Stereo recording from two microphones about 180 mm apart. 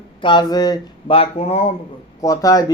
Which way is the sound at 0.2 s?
25° left (ahead or behind).